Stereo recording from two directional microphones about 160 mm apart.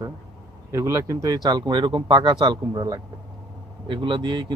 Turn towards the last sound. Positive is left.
turn(degrees=-30)  # may be behind; listen again after turning